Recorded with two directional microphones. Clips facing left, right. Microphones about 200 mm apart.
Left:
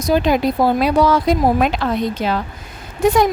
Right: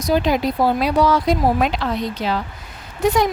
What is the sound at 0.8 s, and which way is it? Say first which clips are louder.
A woman's voice: left 2 dB; 50° left (ahead or behind).